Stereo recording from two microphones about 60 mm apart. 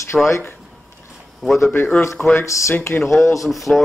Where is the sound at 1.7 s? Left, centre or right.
Left.